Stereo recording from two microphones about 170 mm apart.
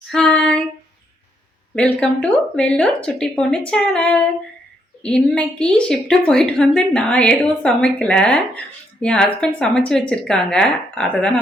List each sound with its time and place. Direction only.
0.1 s female singing: 5° left (ahead or behind)
1.7 s a woman's voice: 5° left (ahead or behind)
3.7 s a sound: 5° left (ahead or behind)
5.0 s a woman's voice: 5° left (ahead or behind)